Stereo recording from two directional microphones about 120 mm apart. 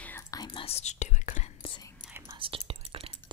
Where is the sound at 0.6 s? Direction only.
65° left (ahead or behind).